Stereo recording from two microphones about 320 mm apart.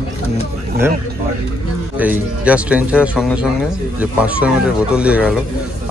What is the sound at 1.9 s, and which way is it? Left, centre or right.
Speech, centre.